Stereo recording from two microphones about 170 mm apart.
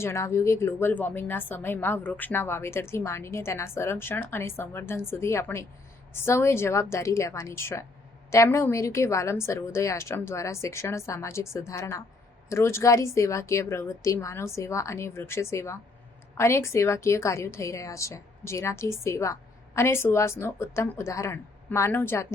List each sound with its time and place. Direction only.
0.0 s a woman's voice: 15° left (ahead or behind)